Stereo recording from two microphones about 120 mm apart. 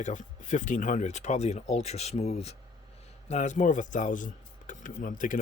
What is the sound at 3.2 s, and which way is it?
Speech, 75° left (ahead or behind).